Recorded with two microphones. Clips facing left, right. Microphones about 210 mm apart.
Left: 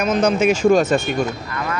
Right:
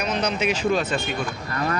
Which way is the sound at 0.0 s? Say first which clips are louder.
Left 8 dB; 45° left (ahead or behind).